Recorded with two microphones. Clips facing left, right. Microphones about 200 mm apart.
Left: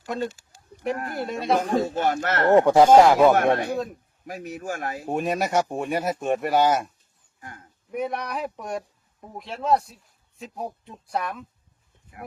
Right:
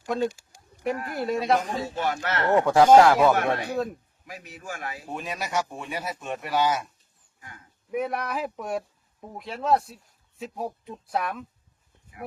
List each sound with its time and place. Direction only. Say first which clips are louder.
1.0 s speech: right 3 dB; centre (ahead or behind)
1.7 s speech: left 6 dB; 45° left (ahead or behind)
2.6 s speech: even; 15° left (ahead or behind)
3.3 s speech: left 4 dB; 50° left (ahead or behind)
7.3 s a sound: left 5 dB; 45° left (ahead or behind)
7.9 s speech: even; centre (ahead or behind)